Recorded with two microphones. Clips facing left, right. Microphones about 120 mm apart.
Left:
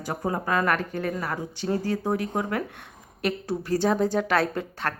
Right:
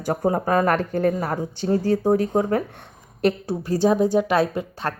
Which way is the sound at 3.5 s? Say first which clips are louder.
Even; 20° right (ahead or behind).